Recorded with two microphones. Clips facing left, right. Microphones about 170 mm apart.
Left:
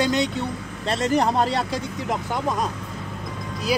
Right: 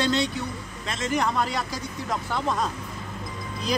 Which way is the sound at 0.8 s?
35° left (ahead or behind).